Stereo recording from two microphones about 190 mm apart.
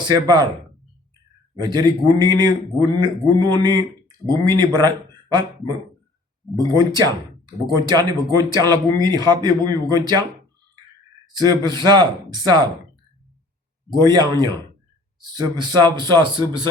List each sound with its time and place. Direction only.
0.0 s speech: 20° right (ahead or behind)
1.5 s speech: 20° right (ahead or behind)
6.6 s speech: 20° right (ahead or behind)
11.3 s speech: 20° right (ahead or behind)
14.0 s speech: 20° right (ahead or behind)